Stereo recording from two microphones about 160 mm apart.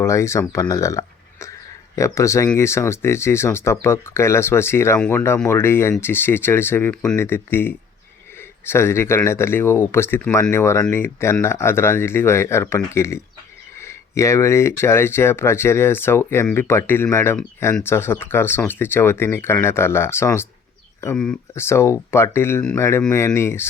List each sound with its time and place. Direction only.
0.0 s speech: 15° left (ahead or behind)
21.5 s speech: 15° left (ahead or behind)